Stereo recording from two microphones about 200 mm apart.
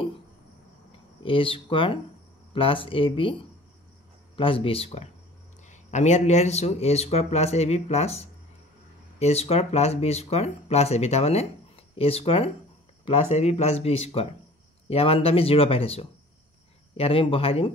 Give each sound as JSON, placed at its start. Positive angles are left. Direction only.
{"t": 1.2, "sound": "speech", "side_deg": 25}
{"t": 4.4, "sound": "speech", "side_deg": 25}